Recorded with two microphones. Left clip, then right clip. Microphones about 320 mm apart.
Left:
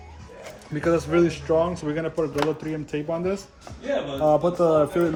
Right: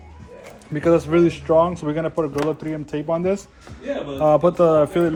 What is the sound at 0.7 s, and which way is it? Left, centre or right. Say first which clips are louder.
Speech: right 5 dB; centre.